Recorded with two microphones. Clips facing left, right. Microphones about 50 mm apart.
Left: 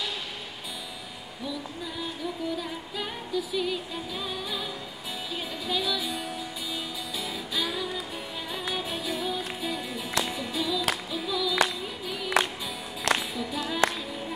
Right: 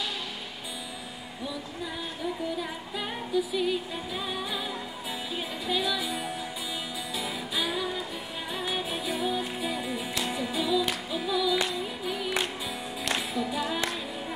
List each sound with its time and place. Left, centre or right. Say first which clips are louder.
2.6 s music: even; centre
12.4 s music: left 8 dB; left
13.3 s music: right 2 dB; centre